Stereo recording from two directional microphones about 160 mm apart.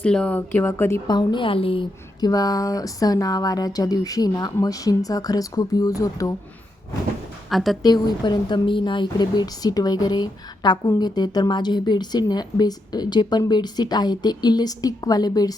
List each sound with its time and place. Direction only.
0.0 s a woman's voice: 5° left (ahead or behind)
7.5 s speech: centre (ahead or behind)
7.8 s a woman's voice: 25° left (ahead or behind)